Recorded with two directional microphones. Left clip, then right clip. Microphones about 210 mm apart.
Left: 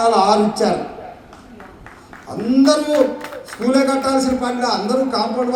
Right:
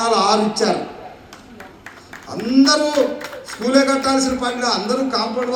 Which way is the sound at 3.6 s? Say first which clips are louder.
Even; 55° left (ahead or behind).